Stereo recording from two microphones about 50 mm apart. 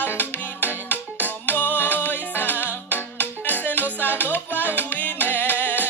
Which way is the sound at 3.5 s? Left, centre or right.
Left.